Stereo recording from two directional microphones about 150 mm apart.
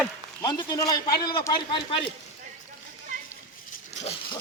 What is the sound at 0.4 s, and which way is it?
A man's voice, 25° left (ahead or behind).